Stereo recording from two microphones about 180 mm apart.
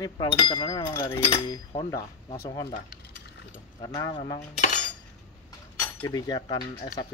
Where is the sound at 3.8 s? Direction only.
25° left (ahead or behind).